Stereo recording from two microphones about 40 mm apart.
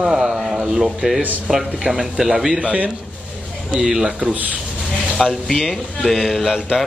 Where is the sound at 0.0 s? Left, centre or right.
Centre.